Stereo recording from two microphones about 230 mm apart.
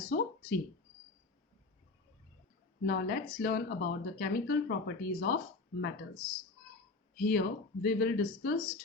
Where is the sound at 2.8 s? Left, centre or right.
Left.